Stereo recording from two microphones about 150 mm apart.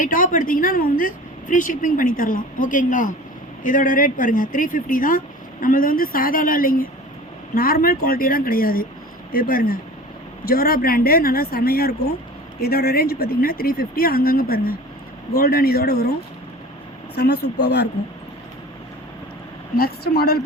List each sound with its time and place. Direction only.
0.0 s speech: 65° left (ahead or behind)
10.4 s speech: 85° left
17.2 s speech: 90° left
19.7 s speech: 85° left